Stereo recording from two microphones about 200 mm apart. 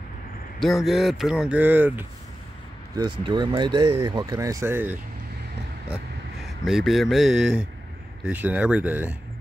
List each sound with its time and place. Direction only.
0.6 s speech: centre (ahead or behind)
3.0 s speech: 25° right (ahead or behind)
6.4 s speech: centre (ahead or behind)